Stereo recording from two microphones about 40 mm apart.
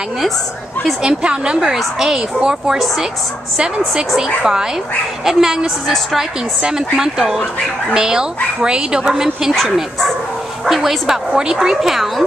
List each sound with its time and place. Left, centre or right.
1.0 s speech: right
2.0 s a woman's voice: centre
5.2 s a woman's voice: centre
9.5 s speech: centre
11.3 s a woman's voice: centre